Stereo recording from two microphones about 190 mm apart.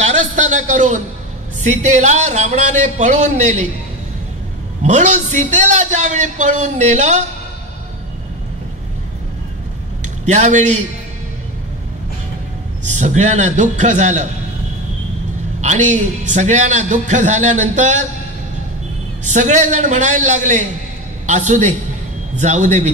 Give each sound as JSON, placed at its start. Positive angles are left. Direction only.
{"t": 0.0, "sound": "a sound", "side_deg": -40}
{"t": 1.7, "sound": "a man's voice", "side_deg": -40}
{"t": 4.8, "sound": "a man's voice", "side_deg": -40}
{"t": 10.0, "sound": "a man's voice", "side_deg": -40}
{"t": 12.8, "sound": "a man's voice", "side_deg": -40}
{"t": 15.6, "sound": "a man's voice", "side_deg": -40}
{"t": 19.2, "sound": "a man's voice", "side_deg": -40}